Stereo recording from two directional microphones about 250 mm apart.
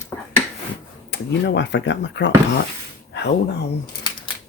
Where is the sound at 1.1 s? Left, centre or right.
Left.